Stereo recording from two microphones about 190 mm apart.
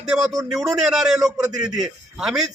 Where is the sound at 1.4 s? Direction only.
20° right (ahead or behind).